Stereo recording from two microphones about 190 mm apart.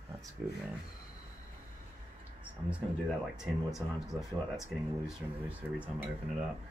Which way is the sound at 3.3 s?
Centre (ahead or behind).